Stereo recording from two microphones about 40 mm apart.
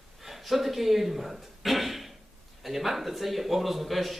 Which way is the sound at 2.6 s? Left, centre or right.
Centre.